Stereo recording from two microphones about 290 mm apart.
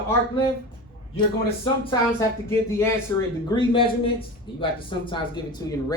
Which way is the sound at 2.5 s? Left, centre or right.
Centre.